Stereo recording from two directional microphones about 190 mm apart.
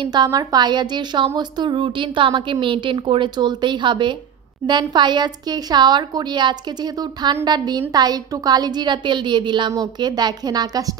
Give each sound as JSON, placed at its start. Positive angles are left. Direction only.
{"t": 0.0, "sound": "a woman's voice", "side_deg": -20}